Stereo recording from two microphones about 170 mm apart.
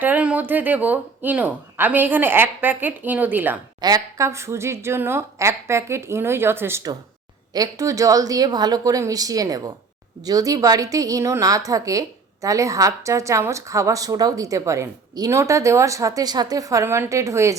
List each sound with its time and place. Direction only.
0.0 s a woman's voice: 10° right (ahead or behind)
3.8 s a woman's voice: 20° right (ahead or behind)